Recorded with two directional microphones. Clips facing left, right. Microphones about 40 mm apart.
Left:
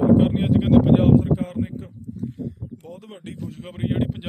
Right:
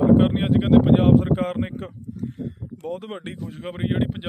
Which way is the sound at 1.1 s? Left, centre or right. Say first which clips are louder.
Even; right.